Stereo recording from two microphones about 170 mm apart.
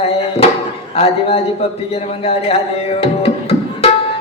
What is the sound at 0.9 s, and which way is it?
Speech, 35° left (ahead or behind).